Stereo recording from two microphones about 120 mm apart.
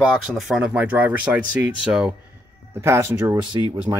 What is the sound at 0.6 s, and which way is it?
Speech, 10° right (ahead or behind).